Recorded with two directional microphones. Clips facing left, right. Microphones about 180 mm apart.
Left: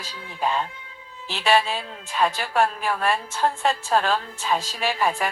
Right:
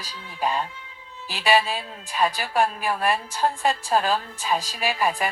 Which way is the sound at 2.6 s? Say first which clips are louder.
Left 1 dB; 15° right (ahead or behind).